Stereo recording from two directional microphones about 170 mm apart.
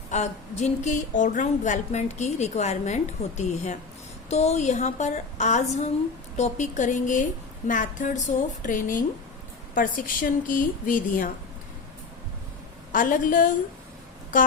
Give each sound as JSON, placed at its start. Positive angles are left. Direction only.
{"t": 0.1, "sound": "a woman's voice", "side_deg": 40}
{"t": 12.9, "sound": "a woman's voice", "side_deg": 50}